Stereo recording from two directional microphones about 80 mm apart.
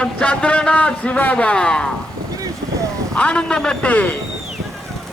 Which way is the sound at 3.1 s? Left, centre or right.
Centre.